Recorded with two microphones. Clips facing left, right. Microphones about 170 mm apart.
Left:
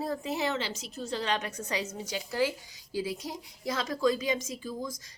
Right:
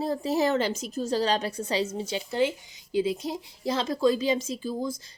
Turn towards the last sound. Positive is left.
turn(degrees=-30)  # may be behind; listen again after turning